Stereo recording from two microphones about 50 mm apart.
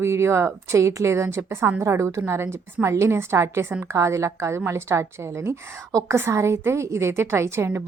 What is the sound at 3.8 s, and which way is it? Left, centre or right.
A woman's voice, right.